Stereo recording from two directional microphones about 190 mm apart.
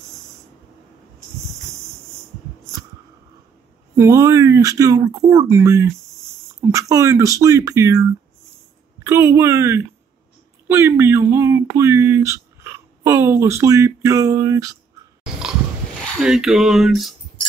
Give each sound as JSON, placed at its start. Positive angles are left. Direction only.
{"t": 3.9, "sound": "speech", "side_deg": -15}
{"t": 9.0, "sound": "speech", "side_deg": -15}
{"t": 16.2, "sound": "a sound", "side_deg": 0}